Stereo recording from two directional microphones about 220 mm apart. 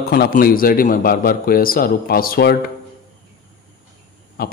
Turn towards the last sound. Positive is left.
turn(degrees=45)  # may be behind; listen again after turning